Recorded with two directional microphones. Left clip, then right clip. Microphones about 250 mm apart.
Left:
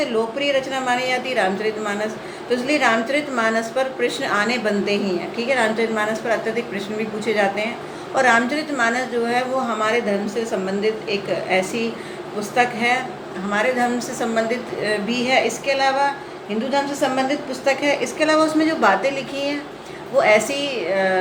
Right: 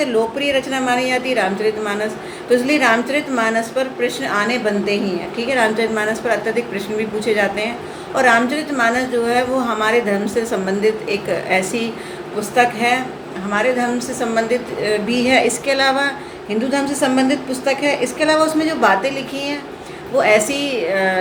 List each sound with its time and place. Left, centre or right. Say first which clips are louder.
0.0 s a woman's voice: right 3 dB; centre